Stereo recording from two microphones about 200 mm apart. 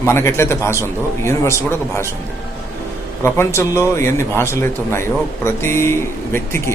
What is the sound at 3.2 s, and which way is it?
Speech, 15° left (ahead or behind).